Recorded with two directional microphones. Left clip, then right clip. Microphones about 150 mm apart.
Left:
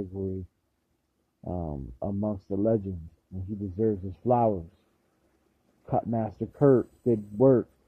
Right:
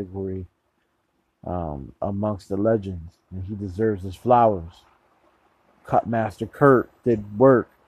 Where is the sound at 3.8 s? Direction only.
15° right (ahead or behind).